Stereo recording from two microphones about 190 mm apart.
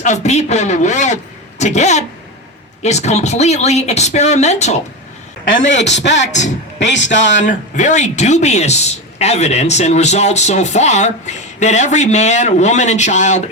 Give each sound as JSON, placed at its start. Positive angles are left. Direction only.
{"t": 0.0, "sound": "speech", "side_deg": 35}
{"t": 5.6, "sound": "speech", "side_deg": 70}
{"t": 7.4, "sound": "speech", "side_deg": 40}